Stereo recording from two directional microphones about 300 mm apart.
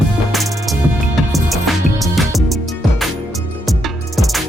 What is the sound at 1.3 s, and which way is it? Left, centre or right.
Music, centre.